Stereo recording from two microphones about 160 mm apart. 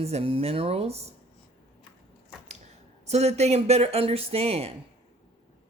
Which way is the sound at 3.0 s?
40° right (ahead or behind).